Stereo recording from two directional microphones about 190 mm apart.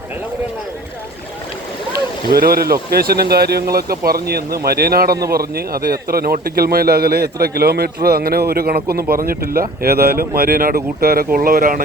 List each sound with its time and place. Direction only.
2.3 s a man's voice: 55° right (ahead or behind)